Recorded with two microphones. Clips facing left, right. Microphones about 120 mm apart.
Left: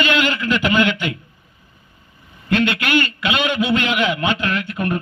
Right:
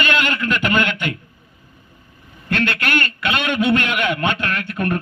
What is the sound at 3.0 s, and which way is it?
A man's voice, 55° right (ahead or behind).